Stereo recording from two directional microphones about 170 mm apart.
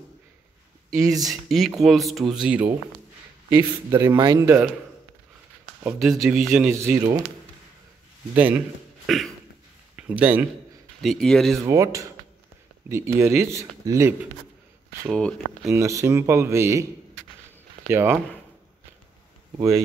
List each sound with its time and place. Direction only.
0.8 s speech: 20° right (ahead or behind)
1.2 s speech: centre (ahead or behind)
5.9 s speech: centre (ahead or behind)
6.7 s speech: 15° right (ahead or behind)
9.0 s a sound: centre (ahead or behind)
9.9 s speech: 10° right (ahead or behind)
11.0 s speech: centre (ahead or behind)
11.6 s speech: 20° right (ahead or behind)
15.0 s speech: 5° left (ahead or behind)
15.7 s speech: 15° right (ahead or behind)
17.8 s speech: 15° right (ahead or behind)